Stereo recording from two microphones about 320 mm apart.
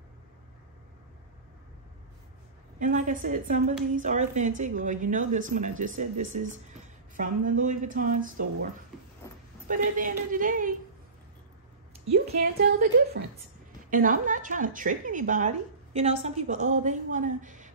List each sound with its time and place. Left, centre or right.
2.8 s a woman's voice: right
9.7 s a woman's voice: right
12.1 s a woman's voice: right
13.8 s a woman's voice: right